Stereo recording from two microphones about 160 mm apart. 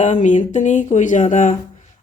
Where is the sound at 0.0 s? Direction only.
50° left (ahead or behind).